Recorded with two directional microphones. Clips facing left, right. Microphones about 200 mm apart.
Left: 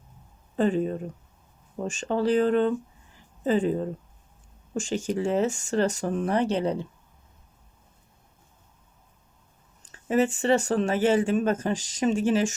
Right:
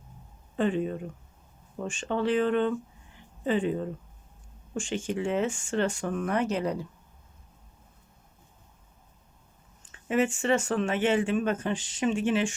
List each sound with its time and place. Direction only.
0.5 s speech: 40° left (ahead or behind)
9.8 s speech: 40° left (ahead or behind)